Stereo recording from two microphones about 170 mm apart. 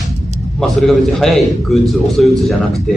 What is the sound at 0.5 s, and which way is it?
A man's voice, centre (ahead or behind).